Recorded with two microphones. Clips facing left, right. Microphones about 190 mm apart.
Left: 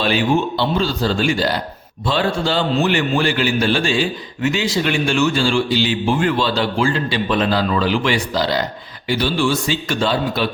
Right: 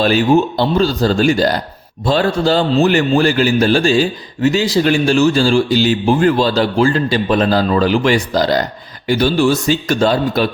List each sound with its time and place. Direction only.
0.0 s a man's voice: 40° right (ahead or behind)